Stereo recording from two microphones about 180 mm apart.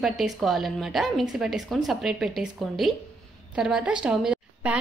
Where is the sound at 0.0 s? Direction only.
Centre (ahead or behind).